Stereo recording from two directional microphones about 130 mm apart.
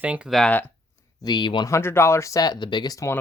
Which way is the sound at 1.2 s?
35° left (ahead or behind).